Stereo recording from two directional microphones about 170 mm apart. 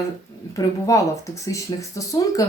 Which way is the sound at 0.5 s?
20° left (ahead or behind).